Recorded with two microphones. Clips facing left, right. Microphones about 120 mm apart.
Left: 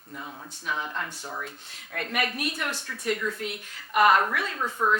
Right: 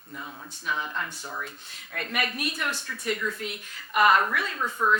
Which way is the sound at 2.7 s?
30° left (ahead or behind).